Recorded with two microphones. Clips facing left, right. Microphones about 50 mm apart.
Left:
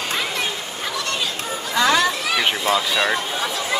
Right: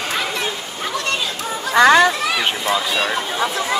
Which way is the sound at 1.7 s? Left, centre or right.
Right.